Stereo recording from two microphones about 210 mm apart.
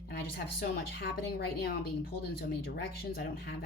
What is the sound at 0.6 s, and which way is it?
Speech, 50° left (ahead or behind).